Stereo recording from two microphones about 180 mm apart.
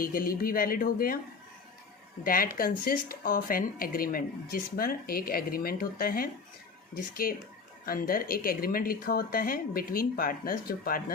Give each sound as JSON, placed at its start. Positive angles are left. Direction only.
{"t": 0.0, "sound": "speech", "side_deg": 55}
{"t": 2.2, "sound": "speech", "side_deg": 55}